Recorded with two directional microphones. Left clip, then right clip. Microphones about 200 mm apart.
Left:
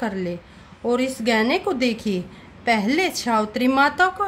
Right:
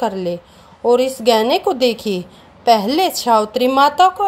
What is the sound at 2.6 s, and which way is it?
A woman's voice, 15° right (ahead or behind).